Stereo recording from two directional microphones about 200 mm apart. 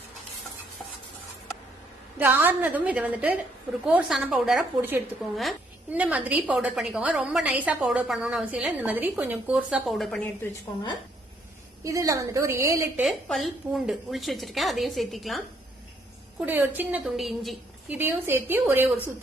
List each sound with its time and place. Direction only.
2.1 s a woman's voice: 10° right (ahead or behind)
11.8 s a woman's voice: 15° right (ahead or behind)
13.1 s a woman's voice: centre (ahead or behind)
16.4 s a woman's voice: 10° right (ahead or behind)